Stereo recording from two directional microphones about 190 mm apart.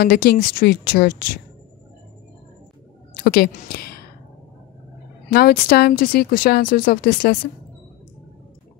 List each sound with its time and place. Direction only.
0.0 s speech: 55° left (ahead or behind)
3.3 s speech: 50° left (ahead or behind)
5.3 s speech: 55° left (ahead or behind)